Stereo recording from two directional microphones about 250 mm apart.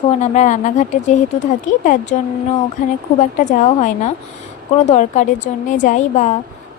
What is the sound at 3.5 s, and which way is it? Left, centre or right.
A woman's voice, left.